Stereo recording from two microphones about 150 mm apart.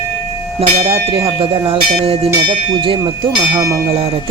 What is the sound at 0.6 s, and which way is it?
Speech, 40° right (ahead or behind).